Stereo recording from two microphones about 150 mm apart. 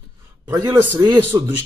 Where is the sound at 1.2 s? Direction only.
15° right (ahead or behind).